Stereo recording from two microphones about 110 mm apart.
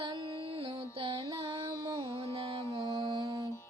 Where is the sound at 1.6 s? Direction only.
30° right (ahead or behind).